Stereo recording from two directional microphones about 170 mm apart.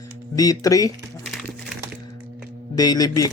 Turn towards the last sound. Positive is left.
turn(degrees=20)  # may be behind; listen again after turning